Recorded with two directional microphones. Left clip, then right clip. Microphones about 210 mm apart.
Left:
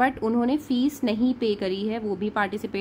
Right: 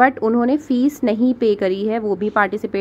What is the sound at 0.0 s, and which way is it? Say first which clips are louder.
Speech: right 8 dB; 10° right (ahead or behind).